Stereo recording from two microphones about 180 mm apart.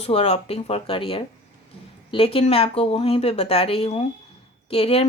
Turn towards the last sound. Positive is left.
turn(degrees=30)  # may be behind; listen again after turning